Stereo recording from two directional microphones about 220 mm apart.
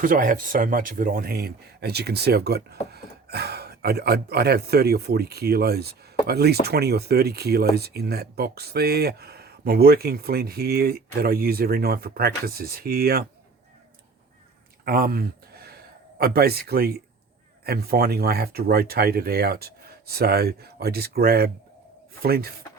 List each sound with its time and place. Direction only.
0.0 s speech: 40° right (ahead or behind)
14.8 s speech: 45° right (ahead or behind)